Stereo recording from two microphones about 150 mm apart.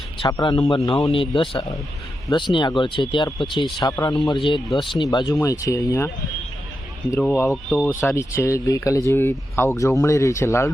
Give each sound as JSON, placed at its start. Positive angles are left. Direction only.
{"t": 0.2, "sound": "speech", "side_deg": 30}
{"t": 7.1, "sound": "speech", "side_deg": 15}